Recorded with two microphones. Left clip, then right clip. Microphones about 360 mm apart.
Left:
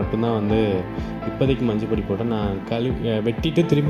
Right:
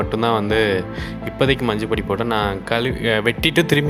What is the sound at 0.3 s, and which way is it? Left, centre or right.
Speech, right.